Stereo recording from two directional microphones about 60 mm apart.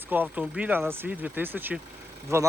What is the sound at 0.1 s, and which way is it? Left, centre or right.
Speech, right.